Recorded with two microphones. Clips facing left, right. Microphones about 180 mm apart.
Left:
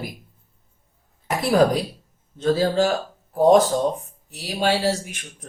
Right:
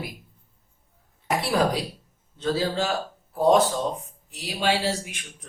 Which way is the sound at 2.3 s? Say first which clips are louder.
Left 6 dB; 45° left (ahead or behind).